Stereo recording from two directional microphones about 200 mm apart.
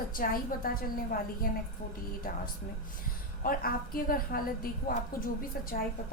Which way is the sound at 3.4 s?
45° left (ahead or behind).